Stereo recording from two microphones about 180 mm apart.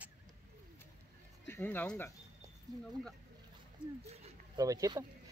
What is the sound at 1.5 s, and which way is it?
Speech, 10° left (ahead or behind).